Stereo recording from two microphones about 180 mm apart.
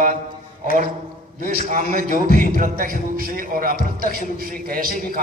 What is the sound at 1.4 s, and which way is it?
A man's voice, 50° right (ahead or behind).